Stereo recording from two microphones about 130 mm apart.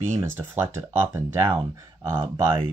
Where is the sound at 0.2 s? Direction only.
15° right (ahead or behind).